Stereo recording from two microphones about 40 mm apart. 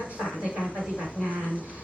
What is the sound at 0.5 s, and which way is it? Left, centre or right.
Speech, centre.